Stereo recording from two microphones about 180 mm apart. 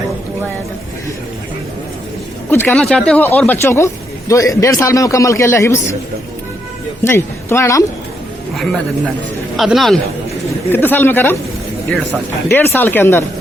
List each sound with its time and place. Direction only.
2.5 s a man's voice: 10° left (ahead or behind)
7.0 s a man's voice: 15° left (ahead or behind)
8.5 s speech: centre (ahead or behind)
10.7 s a man's voice: 10° left (ahead or behind)
12.5 s a man's voice: 10° left (ahead or behind)